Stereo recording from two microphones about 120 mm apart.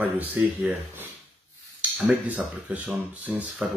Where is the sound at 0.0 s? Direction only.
15° right (ahead or behind).